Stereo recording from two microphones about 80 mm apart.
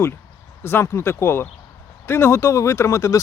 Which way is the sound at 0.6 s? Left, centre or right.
Left.